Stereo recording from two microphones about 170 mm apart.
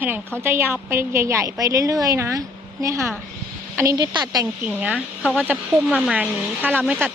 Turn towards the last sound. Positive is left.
turn(degrees=-10)  # may be behind; listen again after turning